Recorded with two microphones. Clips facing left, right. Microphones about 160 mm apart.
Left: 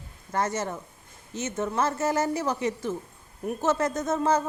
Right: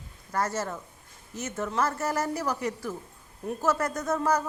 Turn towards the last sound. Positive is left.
turn(degrees=25)  # may be behind; listen again after turning